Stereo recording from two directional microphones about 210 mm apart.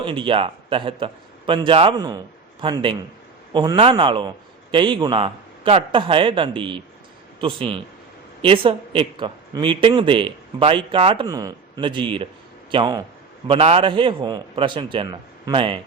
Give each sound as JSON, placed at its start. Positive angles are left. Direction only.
{"t": 0.0, "sound": "a man's voice", "side_deg": -25}